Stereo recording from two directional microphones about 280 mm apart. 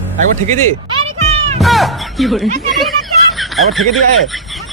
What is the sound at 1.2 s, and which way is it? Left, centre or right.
Music, right.